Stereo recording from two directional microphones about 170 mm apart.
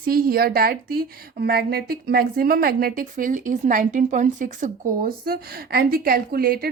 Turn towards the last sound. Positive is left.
turn(degrees=-60)  # may be behind; listen again after turning